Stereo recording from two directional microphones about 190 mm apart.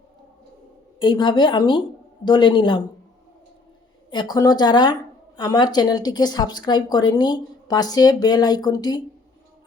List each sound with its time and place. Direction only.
0.9 s speech: 25° left (ahead or behind)
4.1 s speech: 20° left (ahead or behind)